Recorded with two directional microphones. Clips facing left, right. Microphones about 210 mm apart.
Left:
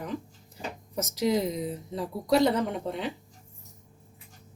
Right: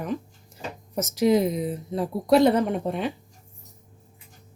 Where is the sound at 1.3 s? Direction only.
55° right (ahead or behind).